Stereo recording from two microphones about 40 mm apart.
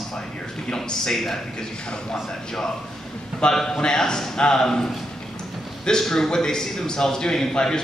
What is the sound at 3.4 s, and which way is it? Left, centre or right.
A man's voice, centre.